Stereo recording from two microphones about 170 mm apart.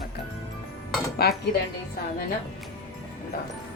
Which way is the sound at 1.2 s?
70° left (ahead or behind).